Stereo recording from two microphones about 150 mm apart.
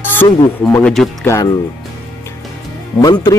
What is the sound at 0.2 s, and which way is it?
Speech, 15° left (ahead or behind).